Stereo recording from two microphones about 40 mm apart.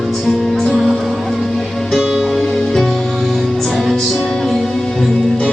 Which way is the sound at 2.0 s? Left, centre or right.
Centre.